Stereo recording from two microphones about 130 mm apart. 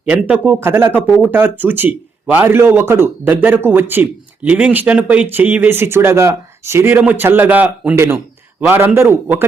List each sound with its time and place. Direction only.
0.1 s speech: 10° right (ahead or behind)